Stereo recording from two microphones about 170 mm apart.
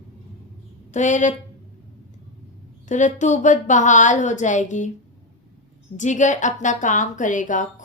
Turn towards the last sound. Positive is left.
turn(degrees=50)  # may be behind; listen again after turning